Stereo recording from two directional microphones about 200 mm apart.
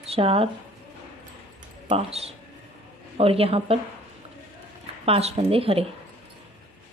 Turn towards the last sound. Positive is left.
turn(degrees=-30)  # may be behind; listen again after turning